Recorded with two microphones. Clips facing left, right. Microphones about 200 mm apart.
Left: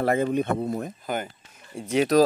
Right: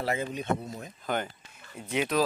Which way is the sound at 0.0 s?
55° left (ahead or behind).